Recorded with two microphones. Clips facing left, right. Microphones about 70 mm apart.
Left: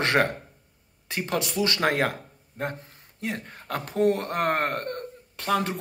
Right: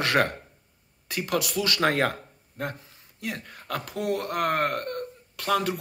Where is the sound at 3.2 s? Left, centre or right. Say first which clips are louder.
Left 2 dB; left.